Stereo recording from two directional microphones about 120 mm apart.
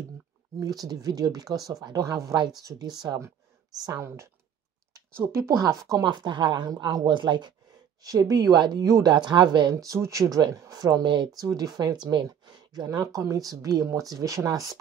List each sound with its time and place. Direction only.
0.6 s speech: 30° right (ahead or behind)
6.0 s speech: 40° right (ahead or behind)